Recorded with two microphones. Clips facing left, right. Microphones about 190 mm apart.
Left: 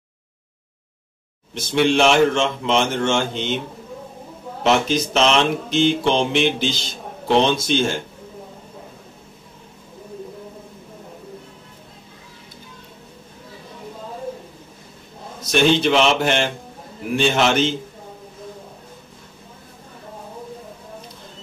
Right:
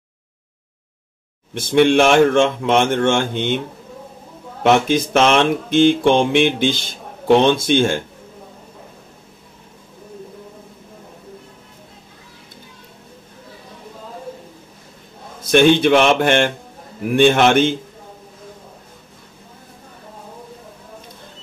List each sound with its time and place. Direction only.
1.5 s speech: 55° right (ahead or behind)
4.6 s speech: 55° right (ahead or behind)
15.4 s speech: 55° right (ahead or behind)